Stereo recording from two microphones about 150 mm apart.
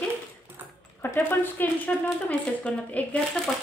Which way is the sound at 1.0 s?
15° left (ahead or behind).